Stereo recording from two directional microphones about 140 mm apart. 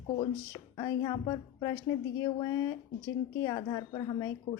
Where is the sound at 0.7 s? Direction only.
30° left (ahead or behind).